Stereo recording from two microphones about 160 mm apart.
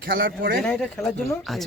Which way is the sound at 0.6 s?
5° left (ahead or behind).